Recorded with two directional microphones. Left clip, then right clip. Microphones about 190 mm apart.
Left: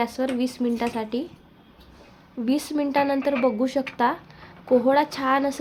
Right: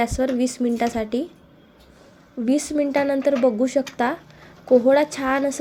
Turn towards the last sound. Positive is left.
turn(degrees=-10)  # may be behind; listen again after turning